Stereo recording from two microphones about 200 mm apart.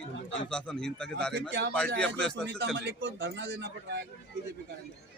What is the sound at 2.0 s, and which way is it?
Speech, 5° left (ahead or behind).